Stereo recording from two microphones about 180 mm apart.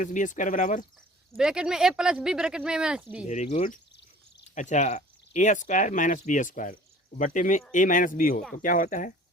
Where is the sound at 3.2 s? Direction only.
40° left (ahead or behind).